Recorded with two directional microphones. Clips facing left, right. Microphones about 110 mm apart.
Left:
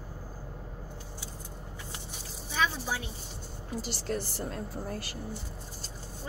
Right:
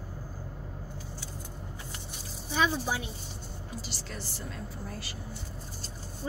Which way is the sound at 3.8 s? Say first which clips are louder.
Left 11 dB; 50° left (ahead or behind).